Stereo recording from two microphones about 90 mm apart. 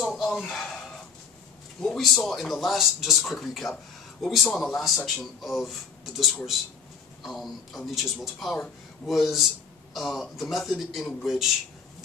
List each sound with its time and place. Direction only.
0.0 s a sound: centre (ahead or behind)
1.8 s a man's voice: centre (ahead or behind)
7.2 s a man's voice: centre (ahead or behind)